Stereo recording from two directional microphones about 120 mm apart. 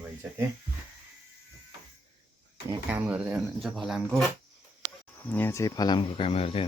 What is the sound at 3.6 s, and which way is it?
Speech, centre (ahead or behind).